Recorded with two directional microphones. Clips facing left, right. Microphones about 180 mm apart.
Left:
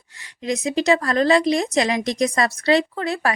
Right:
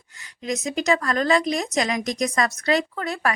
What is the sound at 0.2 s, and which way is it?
Speech, 30° left (ahead or behind).